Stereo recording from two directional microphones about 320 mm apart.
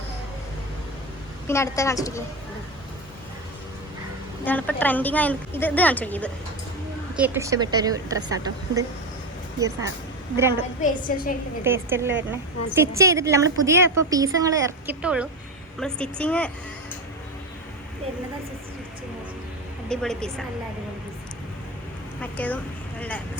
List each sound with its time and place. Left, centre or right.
1.5 s a woman's voice: centre
4.4 s a woman's voice: centre
7.2 s a woman's voice: centre
10.8 s a woman's voice: left
11.6 s a woman's voice: centre
19.9 s a woman's voice: centre
22.2 s speech: centre